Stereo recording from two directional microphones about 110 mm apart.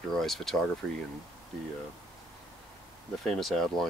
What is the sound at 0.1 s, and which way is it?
Speech, 5° left (ahead or behind).